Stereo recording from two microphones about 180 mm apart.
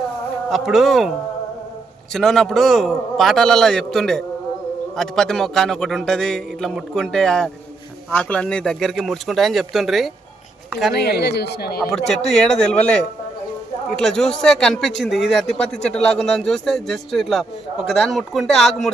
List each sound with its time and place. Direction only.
0.5 s speech: centre (ahead or behind)
2.1 s speech: centre (ahead or behind)
10.9 s speech: 65° left (ahead or behind)
12.1 s speech: 40° left (ahead or behind)
12.4 s speech: 5° left (ahead or behind)